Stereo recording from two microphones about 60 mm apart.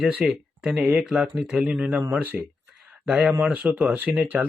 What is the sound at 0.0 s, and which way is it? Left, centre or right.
Speech, right.